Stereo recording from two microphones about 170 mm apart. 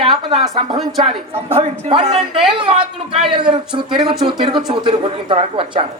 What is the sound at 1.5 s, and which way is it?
Speech, 35° right (ahead or behind).